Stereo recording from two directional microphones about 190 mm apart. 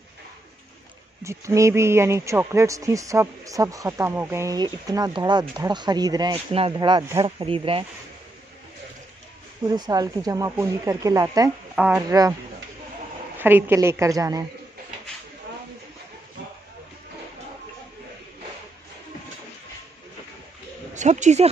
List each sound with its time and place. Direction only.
1.2 s speech: 15° right (ahead or behind)
9.7 s speech: 20° right (ahead or behind)
13.4 s speech: 10° right (ahead or behind)
20.9 s speech: 40° right (ahead or behind)